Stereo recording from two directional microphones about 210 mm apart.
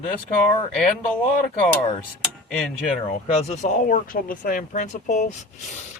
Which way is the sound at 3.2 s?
30° left (ahead or behind).